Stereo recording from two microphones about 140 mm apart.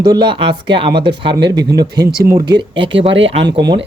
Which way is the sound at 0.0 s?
30° right (ahead or behind).